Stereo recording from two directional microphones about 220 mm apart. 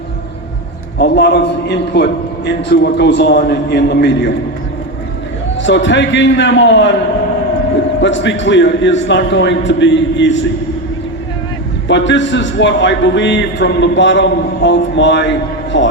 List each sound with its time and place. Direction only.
0.9 s a man's voice: 50° left (ahead or behind)
5.5 s a man's voice: 55° left (ahead or behind)
8.0 s a man's voice: 55° left (ahead or behind)
11.9 s a man's voice: 55° left (ahead or behind)